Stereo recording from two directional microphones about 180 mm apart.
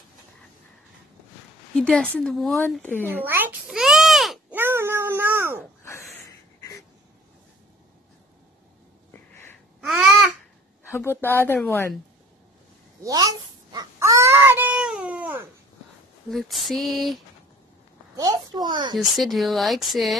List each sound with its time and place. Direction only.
1.8 s speech: 5° left (ahead or behind)
3.1 s a sound: 10° right (ahead or behind)
4.6 s cat: 10° right (ahead or behind)
9.8 s babbling: centre (ahead or behind)
11.0 s speech: 10° left (ahead or behind)
13.0 s a sound: 20° right (ahead or behind)
16.3 s speech: centre (ahead or behind)
18.1 s a child's voice: 20° right (ahead or behind)
18.9 s speech: centre (ahead or behind)